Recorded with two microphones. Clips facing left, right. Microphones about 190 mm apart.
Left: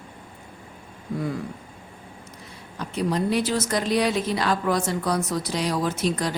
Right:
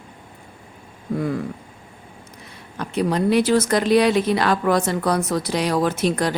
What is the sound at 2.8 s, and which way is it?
Speech, 65° right (ahead or behind).